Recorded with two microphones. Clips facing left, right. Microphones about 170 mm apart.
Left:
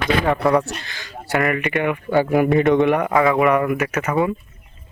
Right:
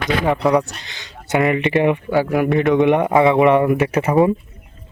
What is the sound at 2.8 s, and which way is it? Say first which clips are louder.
Speech: right 3 dB; 20° right (ahead or behind).